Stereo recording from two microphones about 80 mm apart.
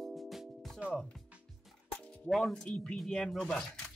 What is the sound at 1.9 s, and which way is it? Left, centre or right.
Music, centre.